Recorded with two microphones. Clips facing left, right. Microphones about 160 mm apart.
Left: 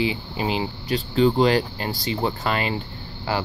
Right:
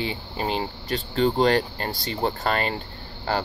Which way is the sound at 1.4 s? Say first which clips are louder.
Left 1 dB; 45° right (ahead or behind).